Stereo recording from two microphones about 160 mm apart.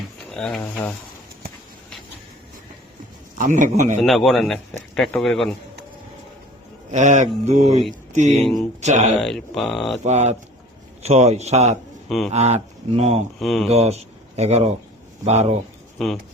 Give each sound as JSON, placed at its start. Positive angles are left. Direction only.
{"t": 0.3, "sound": "speech", "side_deg": 5}
{"t": 3.3, "sound": "a man's voice", "side_deg": -50}
{"t": 4.0, "sound": "a man's voice", "side_deg": 0}
{"t": 6.9, "sound": "a man's voice", "side_deg": -50}
{"t": 9.2, "sound": "a man's voice", "side_deg": 0}
{"t": 10.0, "sound": "a man's voice", "side_deg": -45}
{"t": 12.0, "sound": "speech", "side_deg": 0}
{"t": 12.3, "sound": "speech", "side_deg": -40}
{"t": 13.4, "sound": "a man's voice", "side_deg": 0}
{"t": 13.7, "sound": "a man's voice", "side_deg": -40}